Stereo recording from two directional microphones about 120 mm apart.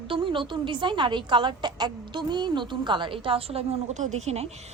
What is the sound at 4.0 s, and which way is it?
Speech, 70° right (ahead or behind).